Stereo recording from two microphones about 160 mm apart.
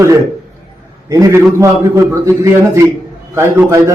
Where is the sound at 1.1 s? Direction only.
20° right (ahead or behind).